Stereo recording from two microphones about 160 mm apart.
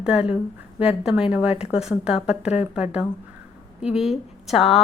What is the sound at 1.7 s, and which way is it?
A woman's voice, 5° right (ahead or behind).